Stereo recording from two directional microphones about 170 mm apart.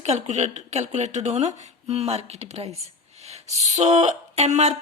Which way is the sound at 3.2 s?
40° right (ahead or behind).